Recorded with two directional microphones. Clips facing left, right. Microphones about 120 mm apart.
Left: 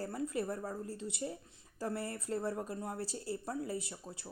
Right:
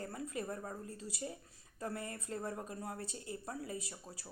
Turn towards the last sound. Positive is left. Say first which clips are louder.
# left 4 dB
turn(degrees=25)  # may be behind; listen again after turning